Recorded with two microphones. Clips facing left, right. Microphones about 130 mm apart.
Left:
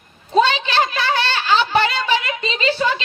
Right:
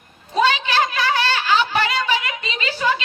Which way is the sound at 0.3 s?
25° left (ahead or behind).